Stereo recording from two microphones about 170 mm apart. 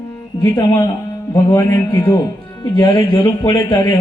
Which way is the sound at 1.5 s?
15° left (ahead or behind).